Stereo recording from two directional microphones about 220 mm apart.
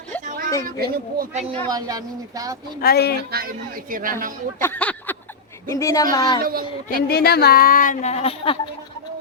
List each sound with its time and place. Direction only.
0.3 s a sound: 40° right (ahead or behind)
0.6 s speech: 40° right (ahead or behind)
1.5 s speech: 15° right (ahead or behind)
2.8 s speech: 45° left (ahead or behind)
3.3 s speech: 40° right (ahead or behind)
4.6 s a sound: 5° left (ahead or behind)
5.6 s a woman's voice: 15° left (ahead or behind)
6.4 s speech: 40° right (ahead or behind)
7.1 s speech: 45° left (ahead or behind); by 8.5 s 25° left (ahead or behind)